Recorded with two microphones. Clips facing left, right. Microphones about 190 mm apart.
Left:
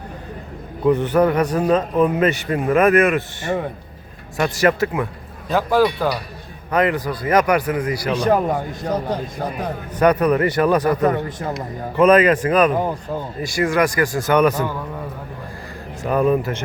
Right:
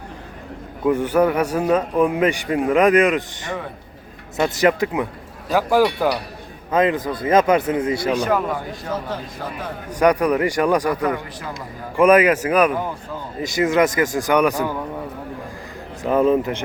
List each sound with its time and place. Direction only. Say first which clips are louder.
0.9 s a man's voice: left 1 dB; 10° right (ahead or behind); by 8.1 s 25° right (ahead or behind)
8.3 s a man's voice: left 3 dB; 40° left (ahead or behind)
10.0 s a man's voice: left 1 dB; 10° right (ahead or behind)
10.8 s a man's voice: left 4 dB; 25° left (ahead or behind)
11.9 s a man's voice: left 1 dB; 10° right (ahead or behind)
13.4 s a man's voice: right 2 dB; 20° right (ahead or behind)
16.0 s a man's voice: right 1 dB; 20° right (ahead or behind)